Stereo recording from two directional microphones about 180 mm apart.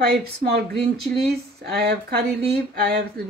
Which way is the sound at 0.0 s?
60° right (ahead or behind).